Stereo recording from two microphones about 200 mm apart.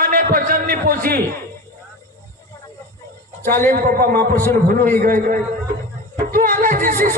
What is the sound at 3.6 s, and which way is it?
A man's voice, 45° right (ahead or behind).